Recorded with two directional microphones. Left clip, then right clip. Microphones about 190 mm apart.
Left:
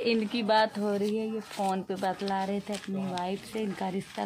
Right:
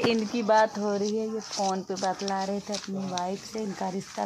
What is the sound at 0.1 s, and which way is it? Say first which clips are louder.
Speech: right 3 dB; 20° right (ahead or behind).